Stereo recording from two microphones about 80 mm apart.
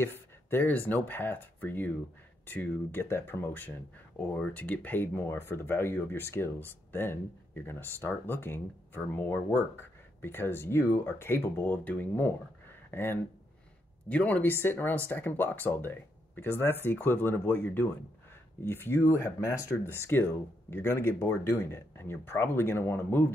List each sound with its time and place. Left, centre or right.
0.0 s speech: left
19.8 s speech: left